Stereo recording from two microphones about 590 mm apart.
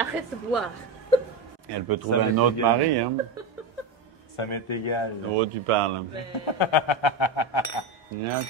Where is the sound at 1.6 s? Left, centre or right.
Right.